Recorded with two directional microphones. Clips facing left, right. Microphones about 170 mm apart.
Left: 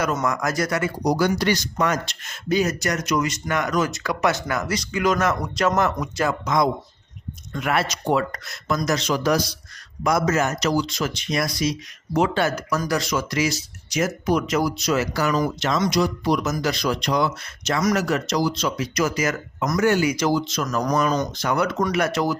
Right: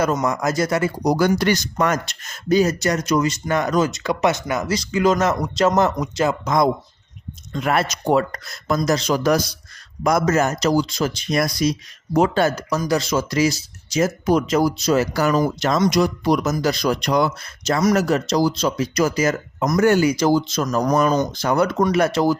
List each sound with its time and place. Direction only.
0.3 s speech: 25° right (ahead or behind)
1.0 s speech: 50° right (ahead or behind); by 6.5 s 20° right (ahead or behind)
7.6 s speech: 40° right (ahead or behind)
12.9 s speech: 25° right (ahead or behind); by 17.3 s 45° right (ahead or behind)
17.4 s speech: 35° right (ahead or behind)
19.7 s speech: 45° right (ahead or behind)